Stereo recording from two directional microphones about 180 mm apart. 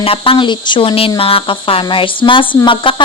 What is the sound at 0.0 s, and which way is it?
Speech, 30° left (ahead or behind).